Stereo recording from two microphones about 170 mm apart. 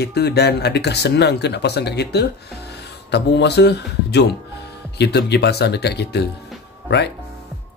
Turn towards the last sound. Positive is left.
turn(degrees=80)